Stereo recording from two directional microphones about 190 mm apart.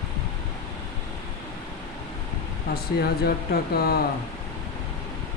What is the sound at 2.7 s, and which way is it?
Speech, 55° left (ahead or behind).